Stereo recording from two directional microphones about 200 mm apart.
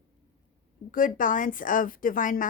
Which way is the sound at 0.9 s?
40° left (ahead or behind).